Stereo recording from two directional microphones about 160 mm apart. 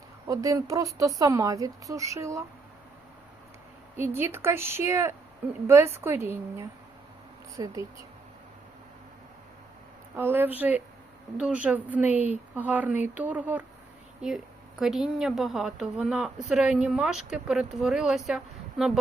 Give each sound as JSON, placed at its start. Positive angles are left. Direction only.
{"t": 0.3, "sound": "speech", "side_deg": -20}
{"t": 3.9, "sound": "speech", "side_deg": -15}
{"t": 10.2, "sound": "speech", "side_deg": -10}